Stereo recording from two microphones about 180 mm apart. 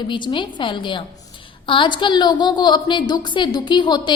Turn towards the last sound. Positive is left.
turn(degrees=25)  # may be behind; listen again after turning